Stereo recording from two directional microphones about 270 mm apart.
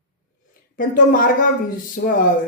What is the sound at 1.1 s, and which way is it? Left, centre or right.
Speech, left.